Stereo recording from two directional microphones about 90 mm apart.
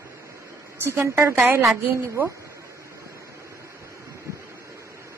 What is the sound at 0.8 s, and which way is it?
A woman's voice, 30° right (ahead or behind).